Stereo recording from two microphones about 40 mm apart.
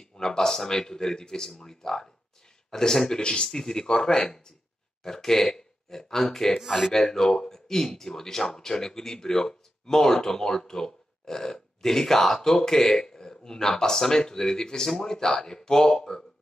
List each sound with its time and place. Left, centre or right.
0.0 s speech: centre
3.4 s speech: centre